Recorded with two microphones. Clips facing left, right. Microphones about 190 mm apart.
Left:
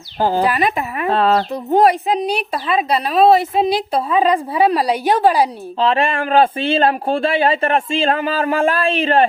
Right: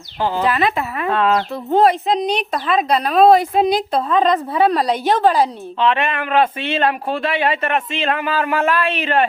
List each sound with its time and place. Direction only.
0.2 s speech: 40° left (ahead or behind)
0.4 s a woman's voice: 15° left (ahead or behind)
1.0 s speech: 30° left (ahead or behind)
1.7 s a woman's voice: 15° left (ahead or behind)
5.8 s speech: 35° left (ahead or behind)